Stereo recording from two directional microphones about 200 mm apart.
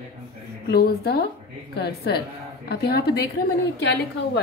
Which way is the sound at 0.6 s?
55° left (ahead or behind).